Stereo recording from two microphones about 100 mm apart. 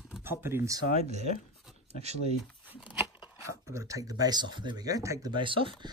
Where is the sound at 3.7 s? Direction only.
30° right (ahead or behind).